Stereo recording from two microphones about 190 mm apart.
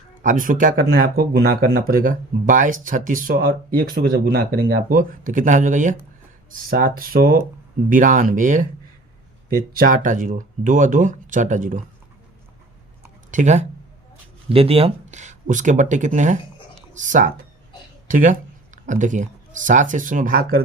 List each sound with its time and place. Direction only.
0.2 s speech: 45° right (ahead or behind)
9.7 s speech: 50° right (ahead or behind)
13.3 s speech: 40° right (ahead or behind)